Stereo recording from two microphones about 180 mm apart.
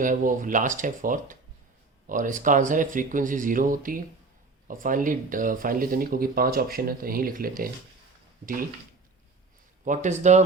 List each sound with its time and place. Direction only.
0.0 s speech: 45° right (ahead or behind)
9.8 s speech: 45° right (ahead or behind)